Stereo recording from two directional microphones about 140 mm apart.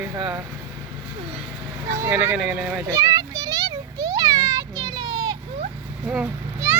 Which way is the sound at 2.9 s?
25° right (ahead or behind).